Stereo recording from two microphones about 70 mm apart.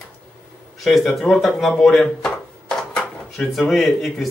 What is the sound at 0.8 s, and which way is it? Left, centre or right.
Speech, centre.